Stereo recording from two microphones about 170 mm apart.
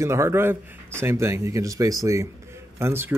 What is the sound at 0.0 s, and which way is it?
Speech, 15° right (ahead or behind).